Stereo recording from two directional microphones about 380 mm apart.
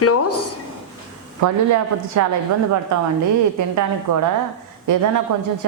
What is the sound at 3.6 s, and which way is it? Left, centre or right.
Speech, right.